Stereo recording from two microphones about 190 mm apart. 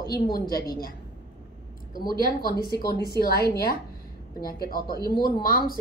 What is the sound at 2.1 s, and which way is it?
A woman's voice, 55° left (ahead or behind).